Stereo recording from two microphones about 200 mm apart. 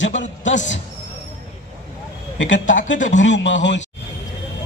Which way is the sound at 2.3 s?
70° left (ahead or behind).